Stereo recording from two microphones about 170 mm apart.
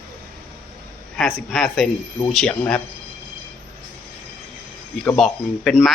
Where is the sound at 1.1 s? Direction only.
Centre (ahead or behind).